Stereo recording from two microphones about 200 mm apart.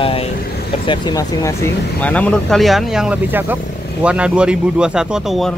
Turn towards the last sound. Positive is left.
turn(degrees=0)  # may be behind; listen again after turning